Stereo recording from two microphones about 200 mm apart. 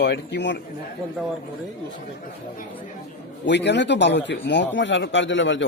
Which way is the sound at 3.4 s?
60° left (ahead or behind).